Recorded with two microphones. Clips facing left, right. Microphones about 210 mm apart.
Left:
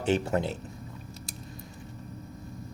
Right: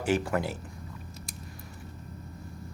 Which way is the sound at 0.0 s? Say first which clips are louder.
Left 1 dB; 25° left (ahead or behind).